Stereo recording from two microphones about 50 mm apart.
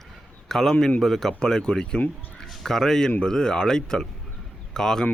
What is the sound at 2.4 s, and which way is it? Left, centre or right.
Speech, centre.